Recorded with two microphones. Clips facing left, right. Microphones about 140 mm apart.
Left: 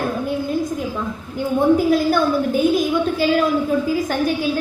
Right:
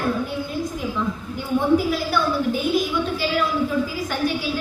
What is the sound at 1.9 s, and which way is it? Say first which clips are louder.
A woman's voice: left 6 dB; 45° left (ahead or behind).